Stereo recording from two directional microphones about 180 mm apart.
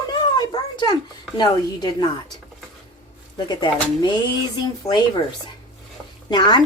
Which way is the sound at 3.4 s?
25° left (ahead or behind).